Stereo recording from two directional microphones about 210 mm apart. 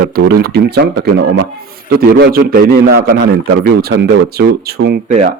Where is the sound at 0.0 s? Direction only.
45° right (ahead or behind).